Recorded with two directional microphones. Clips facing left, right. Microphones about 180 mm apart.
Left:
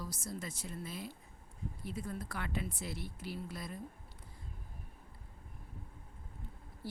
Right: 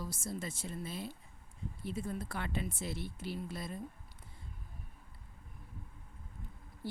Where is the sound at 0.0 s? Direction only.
25° right (ahead or behind).